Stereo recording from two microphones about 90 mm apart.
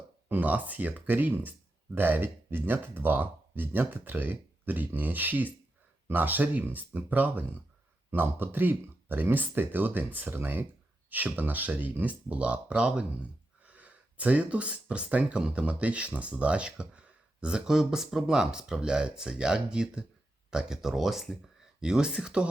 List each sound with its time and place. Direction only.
0.3 s speech: 15° right (ahead or behind)